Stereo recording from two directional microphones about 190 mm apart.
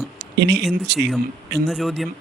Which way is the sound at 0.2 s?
60° right (ahead or behind).